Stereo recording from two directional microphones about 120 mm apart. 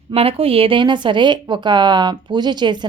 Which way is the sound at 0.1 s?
50° right (ahead or behind).